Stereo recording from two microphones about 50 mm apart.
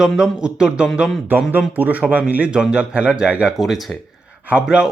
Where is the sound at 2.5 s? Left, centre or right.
Centre.